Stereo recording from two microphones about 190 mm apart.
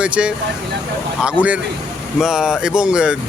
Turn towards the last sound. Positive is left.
turn(degrees=-5)  # may be behind; listen again after turning